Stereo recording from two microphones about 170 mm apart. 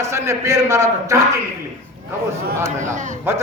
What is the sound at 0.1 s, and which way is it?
A man's voice, 15° right (ahead or behind).